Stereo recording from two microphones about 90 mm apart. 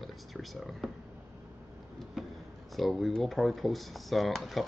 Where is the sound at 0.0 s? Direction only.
Centre (ahead or behind).